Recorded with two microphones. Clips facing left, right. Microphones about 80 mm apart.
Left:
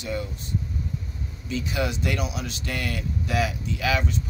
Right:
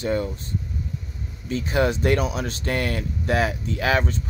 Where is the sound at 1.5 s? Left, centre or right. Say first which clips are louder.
Right 6 dB; right.